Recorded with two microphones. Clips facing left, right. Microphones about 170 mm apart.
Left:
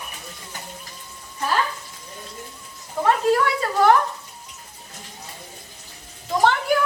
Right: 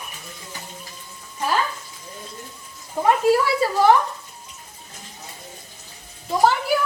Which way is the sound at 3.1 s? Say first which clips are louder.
Right 2 dB; 10° right (ahead or behind).